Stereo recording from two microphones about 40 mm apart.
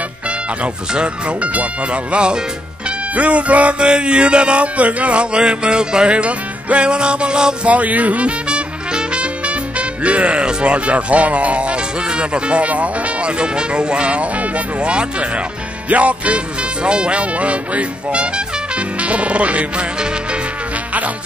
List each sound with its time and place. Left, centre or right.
0.9 s speech: right
3.2 s speech: right
3.8 s music: right
7.6 s speech: right
8.5 s music: right
9.8 s speech: right
13.4 s music: right
15.9 s speech: right
16.8 s music: right